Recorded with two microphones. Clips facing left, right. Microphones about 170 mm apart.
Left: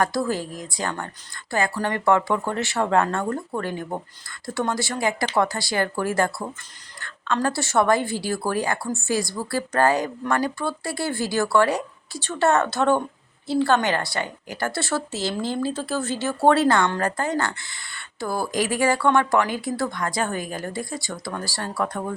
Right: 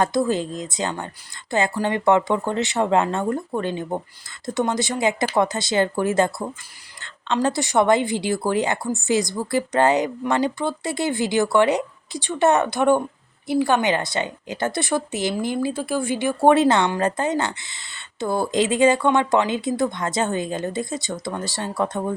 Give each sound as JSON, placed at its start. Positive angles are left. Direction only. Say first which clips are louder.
{"t": 0.0, "sound": "a woman's voice", "louder": "right 3 dB", "side_deg": -20}
{"t": 7.3, "sound": "a woman's voice", "louder": "right 2 dB", "side_deg": -15}